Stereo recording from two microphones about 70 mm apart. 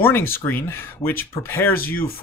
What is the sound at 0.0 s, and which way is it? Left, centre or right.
Speech, left.